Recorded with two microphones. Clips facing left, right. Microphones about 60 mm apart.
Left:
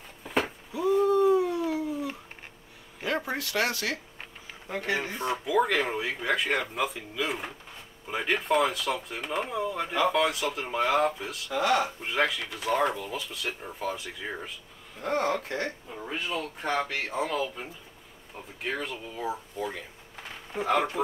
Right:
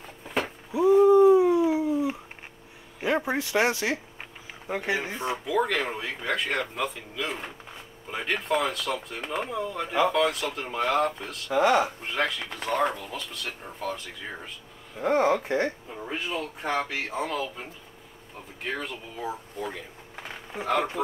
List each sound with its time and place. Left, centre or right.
0.2 s a sound: centre
0.7 s a sound: centre
3.0 s speech: centre
5.3 s speech: centre
11.5 s speech: centre
12.0 s speech: centre
15.0 s speech: centre
15.9 s speech: centre